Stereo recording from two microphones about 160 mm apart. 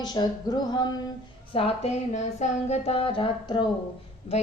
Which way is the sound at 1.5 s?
40° left (ahead or behind).